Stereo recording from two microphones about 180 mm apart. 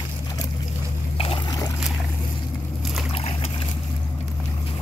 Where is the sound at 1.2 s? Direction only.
30° left (ahead or behind).